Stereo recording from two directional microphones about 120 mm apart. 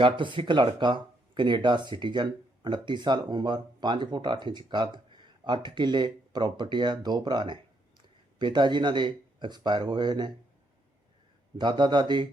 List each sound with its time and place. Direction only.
0.0 s speech: 45° right (ahead or behind)
11.5 s speech: 40° right (ahead or behind)